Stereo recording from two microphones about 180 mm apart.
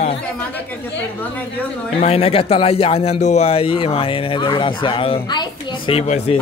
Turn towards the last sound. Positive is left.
turn(degrees=35)  # may be behind; listen again after turning